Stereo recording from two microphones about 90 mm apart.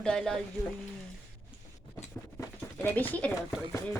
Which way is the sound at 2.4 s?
20° left (ahead or behind).